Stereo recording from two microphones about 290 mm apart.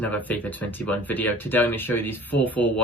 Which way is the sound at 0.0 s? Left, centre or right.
Centre.